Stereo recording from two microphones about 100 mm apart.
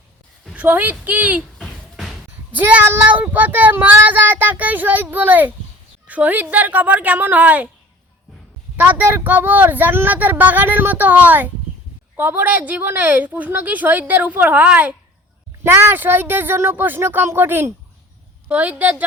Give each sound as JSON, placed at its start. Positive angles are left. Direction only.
{"t": 0.5, "sound": "child singing", "side_deg": -15}
{"t": 1.5, "sound": "a sound", "side_deg": 0}
{"t": 2.5, "sound": "child singing", "side_deg": -15}
{"t": 8.7, "sound": "child singing", "side_deg": -15}
{"t": 15.6, "sound": "speech", "side_deg": -20}
{"t": 18.4, "sound": "child singing", "side_deg": -15}